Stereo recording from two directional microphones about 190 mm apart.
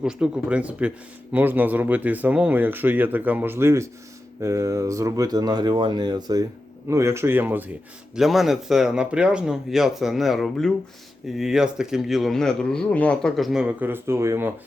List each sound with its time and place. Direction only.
0.0 s speech: 5° right (ahead or behind)